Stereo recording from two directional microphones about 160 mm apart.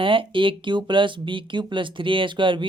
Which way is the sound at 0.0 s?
35° right (ahead or behind).